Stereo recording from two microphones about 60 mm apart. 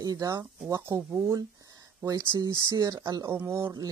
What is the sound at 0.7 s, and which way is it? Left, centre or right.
Speech, right.